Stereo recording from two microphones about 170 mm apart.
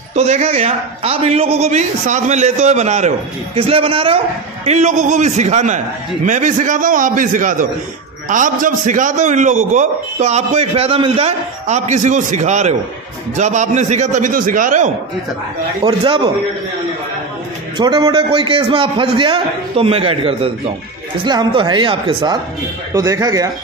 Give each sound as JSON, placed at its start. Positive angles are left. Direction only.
{"t": 0.1, "sound": "a man's voice", "side_deg": -40}
{"t": 4.6, "sound": "a man's voice", "side_deg": -45}
{"t": 15.8, "sound": "a man's voice", "side_deg": -30}
{"t": 17.7, "sound": "a man's voice", "side_deg": -25}